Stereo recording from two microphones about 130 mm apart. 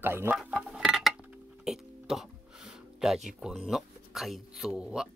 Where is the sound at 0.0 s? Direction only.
15° right (ahead or behind).